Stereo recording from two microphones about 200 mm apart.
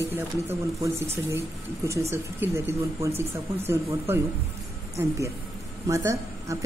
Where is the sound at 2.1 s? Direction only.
10° right (ahead or behind).